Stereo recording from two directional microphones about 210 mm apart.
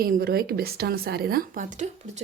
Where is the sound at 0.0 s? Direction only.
45° right (ahead or behind).